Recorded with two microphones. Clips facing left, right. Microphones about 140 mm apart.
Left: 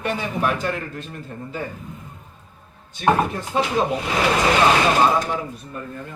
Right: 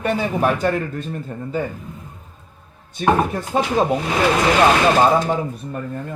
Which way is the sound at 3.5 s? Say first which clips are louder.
Right 2 dB; 40° right (ahead or behind).